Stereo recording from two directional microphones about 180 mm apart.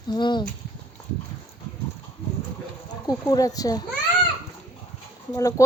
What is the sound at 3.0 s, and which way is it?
Speech, 20° left (ahead or behind).